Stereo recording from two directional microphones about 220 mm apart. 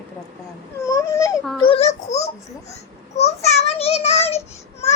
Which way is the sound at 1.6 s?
25° left (ahead or behind).